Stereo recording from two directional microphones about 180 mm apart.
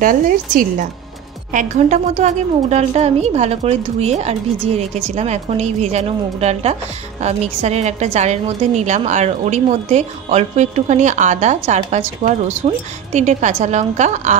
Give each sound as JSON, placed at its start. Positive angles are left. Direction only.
{"t": 0.0, "sound": "a woman's voice", "side_deg": -50}